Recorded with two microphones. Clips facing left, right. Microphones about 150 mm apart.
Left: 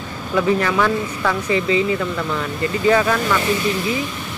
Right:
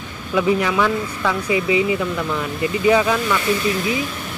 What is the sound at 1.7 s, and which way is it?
Speech, 15° right (ahead or behind).